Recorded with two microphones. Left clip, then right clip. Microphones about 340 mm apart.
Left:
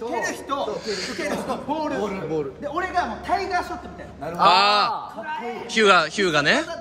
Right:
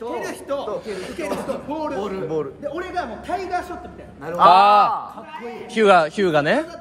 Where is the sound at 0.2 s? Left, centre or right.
Centre.